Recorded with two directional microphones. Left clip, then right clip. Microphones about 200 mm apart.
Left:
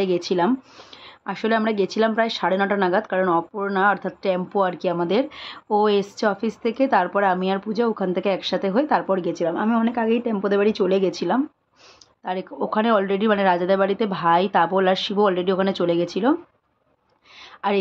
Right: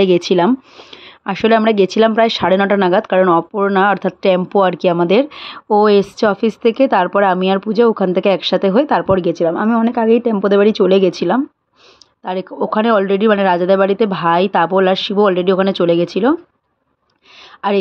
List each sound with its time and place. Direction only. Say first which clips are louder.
0.0 s a woman's voice: right 9 dB; 40° right (ahead or behind)
17.6 s speech: right 6 dB; 20° right (ahead or behind)